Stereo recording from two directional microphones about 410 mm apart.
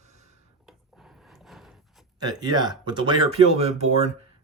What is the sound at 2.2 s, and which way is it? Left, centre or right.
Speech, centre.